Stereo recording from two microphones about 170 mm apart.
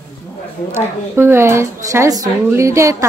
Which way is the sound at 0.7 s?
15° right (ahead or behind).